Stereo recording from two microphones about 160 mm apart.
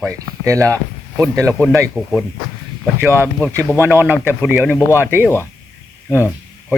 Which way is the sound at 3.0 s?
15° right (ahead or behind).